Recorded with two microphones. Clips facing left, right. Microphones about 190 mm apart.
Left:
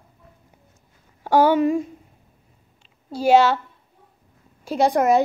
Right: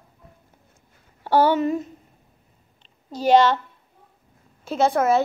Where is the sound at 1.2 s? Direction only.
10° left (ahead or behind).